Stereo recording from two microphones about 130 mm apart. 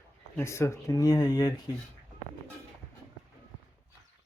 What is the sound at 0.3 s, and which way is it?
Speech, 20° left (ahead or behind).